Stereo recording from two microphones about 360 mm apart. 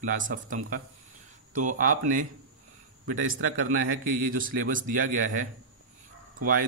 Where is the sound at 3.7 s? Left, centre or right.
Right.